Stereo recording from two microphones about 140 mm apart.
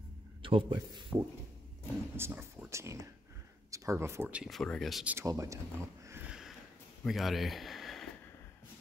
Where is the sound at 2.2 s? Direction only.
15° right (ahead or behind).